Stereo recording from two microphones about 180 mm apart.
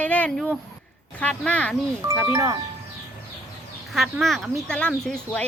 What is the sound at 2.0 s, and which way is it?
Speech, 20° right (ahead or behind).